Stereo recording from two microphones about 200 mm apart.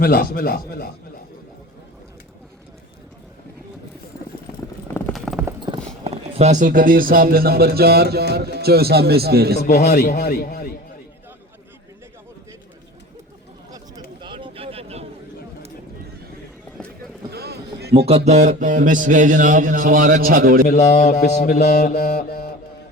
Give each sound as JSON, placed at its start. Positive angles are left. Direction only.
{"t": 0.0, "sound": "a man's voice", "side_deg": 50}
{"t": 5.1, "sound": "clip-clop", "side_deg": 0}
{"t": 5.5, "sound": "clip-clop", "side_deg": -20}
{"t": 6.1, "sound": "speech", "side_deg": -30}
{"t": 9.6, "sound": "a man's voice", "side_deg": 55}
{"t": 13.7, "sound": "a sound", "side_deg": -20}
{"t": 17.3, "sound": "boat", "side_deg": -55}
{"t": 17.9, "sound": "speech", "side_deg": -30}
{"t": 20.7, "sound": "speech", "side_deg": 35}
{"t": 21.6, "sound": "mantra", "side_deg": 55}
{"t": 22.0, "sound": "guitar", "side_deg": 40}